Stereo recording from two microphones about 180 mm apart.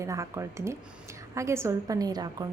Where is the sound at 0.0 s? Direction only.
15° right (ahead or behind).